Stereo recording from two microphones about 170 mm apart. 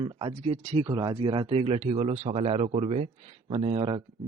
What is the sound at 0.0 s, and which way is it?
Speech, 35° right (ahead or behind).